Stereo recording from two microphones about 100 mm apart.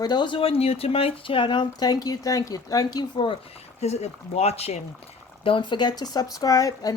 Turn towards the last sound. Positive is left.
turn(degrees=40)  # may be behind; listen again after turning